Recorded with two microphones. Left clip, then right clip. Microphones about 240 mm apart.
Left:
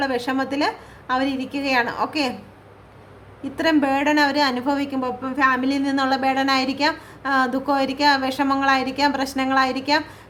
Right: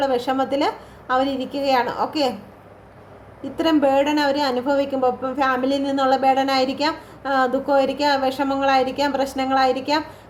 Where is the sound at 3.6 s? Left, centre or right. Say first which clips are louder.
Right 2 dB; left.